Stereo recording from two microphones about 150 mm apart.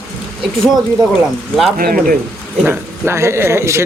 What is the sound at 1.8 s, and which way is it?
Speech, 75° right (ahead or behind).